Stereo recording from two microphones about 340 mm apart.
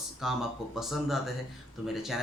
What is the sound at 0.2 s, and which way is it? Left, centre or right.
Speech, centre.